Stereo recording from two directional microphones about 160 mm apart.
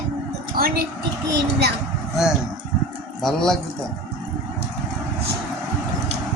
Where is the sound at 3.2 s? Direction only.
5° left (ahead or behind).